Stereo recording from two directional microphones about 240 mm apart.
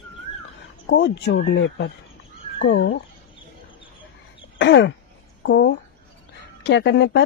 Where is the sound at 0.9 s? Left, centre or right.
Left.